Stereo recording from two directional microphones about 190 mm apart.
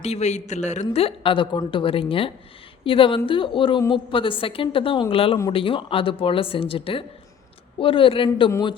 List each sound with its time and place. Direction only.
0.0 s a woman's voice: 35° left (ahead or behind)